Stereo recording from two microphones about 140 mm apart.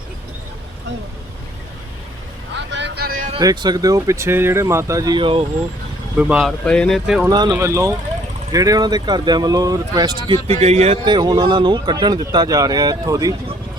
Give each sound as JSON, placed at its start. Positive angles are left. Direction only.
{"t": 3.0, "sound": "a sound", "side_deg": -90}
{"t": 3.3, "sound": "speech", "side_deg": -30}
{"t": 6.1, "sound": "speech", "side_deg": -10}
{"t": 6.7, "sound": "speech", "side_deg": 5}
{"t": 7.3, "sound": "speech", "side_deg": -30}